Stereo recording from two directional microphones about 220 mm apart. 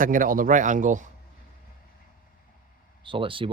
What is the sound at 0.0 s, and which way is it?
Speech, 40° right (ahead or behind).